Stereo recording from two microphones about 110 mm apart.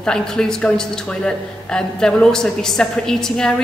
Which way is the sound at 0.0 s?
5° left (ahead or behind).